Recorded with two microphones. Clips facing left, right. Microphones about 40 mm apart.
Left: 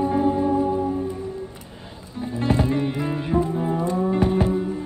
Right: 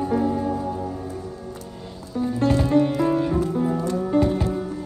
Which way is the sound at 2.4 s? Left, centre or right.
Left.